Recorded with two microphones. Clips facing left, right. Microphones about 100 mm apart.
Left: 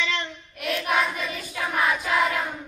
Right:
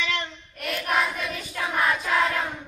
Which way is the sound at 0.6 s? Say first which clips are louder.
Left 1 dB; centre (ahead or behind).